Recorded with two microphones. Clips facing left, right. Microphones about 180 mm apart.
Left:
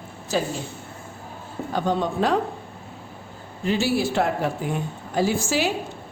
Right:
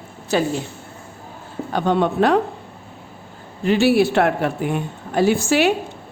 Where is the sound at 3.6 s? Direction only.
65° right (ahead or behind).